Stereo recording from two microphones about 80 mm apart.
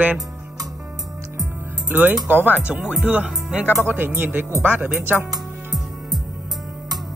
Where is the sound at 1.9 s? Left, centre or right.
Right.